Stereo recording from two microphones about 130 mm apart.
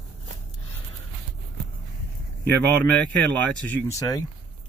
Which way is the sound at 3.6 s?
15° left (ahead or behind).